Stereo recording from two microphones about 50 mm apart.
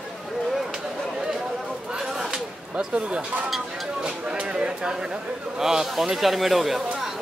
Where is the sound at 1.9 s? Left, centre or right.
Centre.